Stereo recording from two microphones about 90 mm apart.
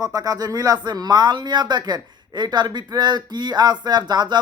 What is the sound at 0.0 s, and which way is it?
Speech, 40° right (ahead or behind).